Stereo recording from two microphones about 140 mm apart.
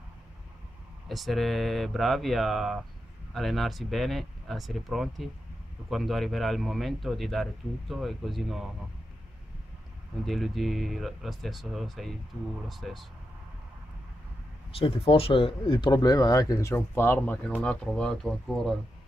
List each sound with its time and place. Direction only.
1.0 s speech: centre (ahead or behind)
10.2 s speech: centre (ahead or behind)
14.8 s speech: 40° left (ahead or behind); by 18.8 s centre (ahead or behind)